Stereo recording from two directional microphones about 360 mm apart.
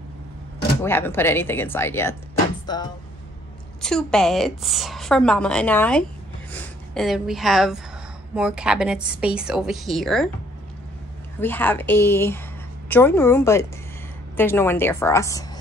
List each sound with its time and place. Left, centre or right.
0.8 s a woman's voice: centre
11.3 s a woman's voice: centre